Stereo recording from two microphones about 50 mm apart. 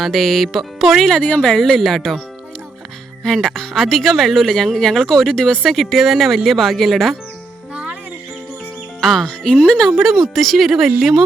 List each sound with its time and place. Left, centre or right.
0.0 s speech: centre
3.2 s speech: centre
5.6 s speech: centre
7.7 s music: right
9.0 s speech: centre
10.0 s speech: centre